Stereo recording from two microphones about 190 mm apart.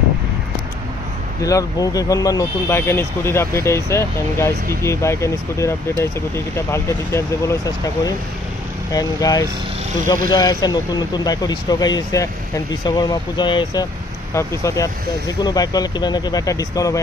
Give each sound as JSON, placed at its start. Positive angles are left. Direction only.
{"t": 1.4, "sound": "speech", "side_deg": 20}